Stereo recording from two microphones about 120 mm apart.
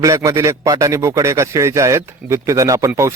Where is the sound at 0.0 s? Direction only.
25° right (ahead or behind).